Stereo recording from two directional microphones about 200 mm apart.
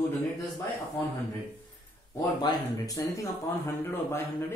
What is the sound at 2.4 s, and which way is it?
Speech, 20° left (ahead or behind).